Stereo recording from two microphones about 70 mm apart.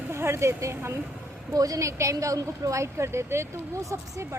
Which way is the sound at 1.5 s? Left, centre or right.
Right.